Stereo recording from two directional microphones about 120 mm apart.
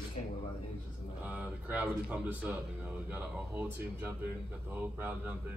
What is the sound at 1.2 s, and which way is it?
A man's voice, 15° right (ahead or behind).